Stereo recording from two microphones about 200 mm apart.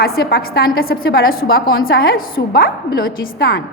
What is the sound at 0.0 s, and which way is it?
A woman's voice, 50° left (ahead or behind).